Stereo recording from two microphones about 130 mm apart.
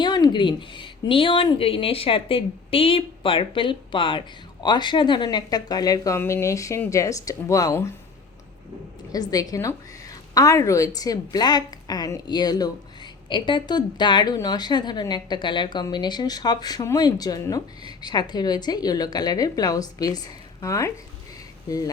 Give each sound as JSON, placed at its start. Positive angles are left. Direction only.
{"t": 0.0, "sound": "a woman's voice", "side_deg": 35}
{"t": 9.3, "sound": "a woman's voice", "side_deg": 30}